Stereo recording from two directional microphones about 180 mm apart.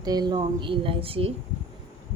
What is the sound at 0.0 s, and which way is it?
Speech, 20° right (ahead or behind).